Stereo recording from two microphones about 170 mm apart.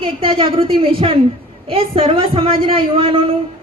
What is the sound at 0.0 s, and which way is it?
A woman's voice, 30° right (ahead or behind).